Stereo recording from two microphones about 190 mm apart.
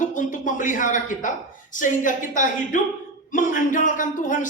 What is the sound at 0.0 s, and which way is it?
A man's voice, 40° left (ahead or behind).